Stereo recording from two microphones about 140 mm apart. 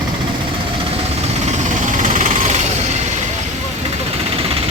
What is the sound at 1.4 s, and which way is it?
Vehicle, 60° right (ahead or behind).